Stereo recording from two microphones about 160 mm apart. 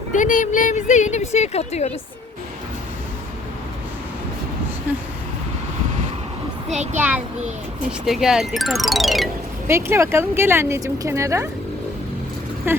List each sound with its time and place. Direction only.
0.1 s speech: 55° left (ahead or behind)
6.9 s speech: 10° right (ahead or behind)
9.6 s speech: 15° right (ahead or behind)
12.7 s speech: 15° right (ahead or behind)